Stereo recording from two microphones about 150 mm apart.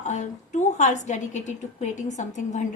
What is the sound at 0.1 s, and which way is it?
A woman's voice, 50° left (ahead or behind).